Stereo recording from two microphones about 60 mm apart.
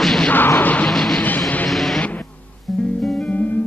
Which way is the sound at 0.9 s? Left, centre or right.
Centre.